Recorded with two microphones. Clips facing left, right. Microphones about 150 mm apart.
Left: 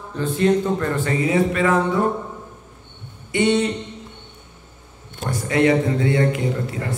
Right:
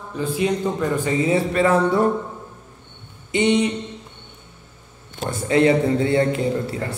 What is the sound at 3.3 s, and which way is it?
Speech, 20° right (ahead or behind).